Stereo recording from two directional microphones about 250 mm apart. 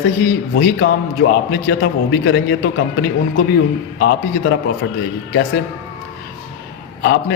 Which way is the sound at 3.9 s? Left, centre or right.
Left.